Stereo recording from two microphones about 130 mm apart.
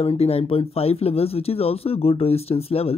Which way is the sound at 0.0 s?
50° left (ahead or behind).